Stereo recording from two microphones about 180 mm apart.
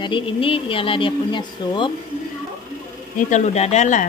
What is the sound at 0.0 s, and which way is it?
Speech, 30° left (ahead or behind).